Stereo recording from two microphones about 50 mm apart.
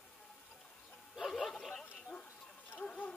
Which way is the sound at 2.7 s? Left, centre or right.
Left.